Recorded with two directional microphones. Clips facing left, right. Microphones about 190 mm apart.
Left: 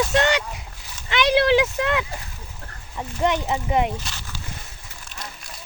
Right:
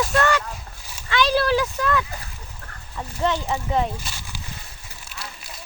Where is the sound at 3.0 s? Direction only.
15° left (ahead or behind).